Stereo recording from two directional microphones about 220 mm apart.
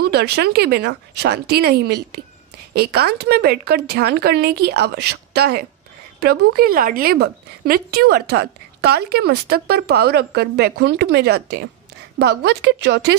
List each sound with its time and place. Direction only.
0.0 s a woman's voice: 45° right (ahead or behind)